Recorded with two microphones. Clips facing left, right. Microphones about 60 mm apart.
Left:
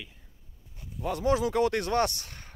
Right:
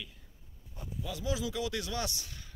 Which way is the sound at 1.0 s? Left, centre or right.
Left.